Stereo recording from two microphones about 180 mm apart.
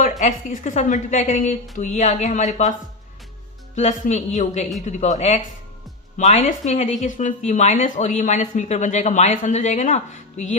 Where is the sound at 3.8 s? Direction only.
40° left (ahead or behind).